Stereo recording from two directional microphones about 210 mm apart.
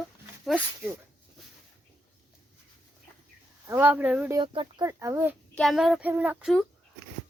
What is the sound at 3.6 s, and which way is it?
Speech, 10° right (ahead or behind).